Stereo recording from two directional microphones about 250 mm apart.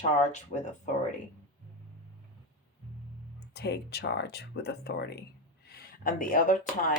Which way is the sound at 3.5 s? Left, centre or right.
Left.